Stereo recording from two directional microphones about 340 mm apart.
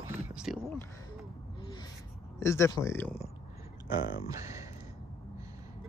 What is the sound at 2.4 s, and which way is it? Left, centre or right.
Speech, centre.